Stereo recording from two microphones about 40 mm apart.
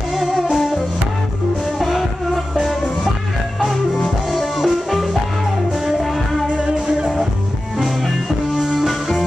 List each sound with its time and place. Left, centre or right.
0.1 s music: centre
1.8 s music: centre
6.5 s music: right
7.8 s music: centre